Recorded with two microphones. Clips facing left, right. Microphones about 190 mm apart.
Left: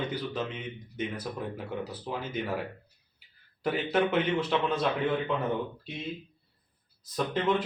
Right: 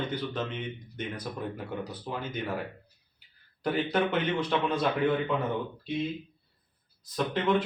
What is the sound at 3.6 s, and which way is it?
Speech, 5° left (ahead or behind).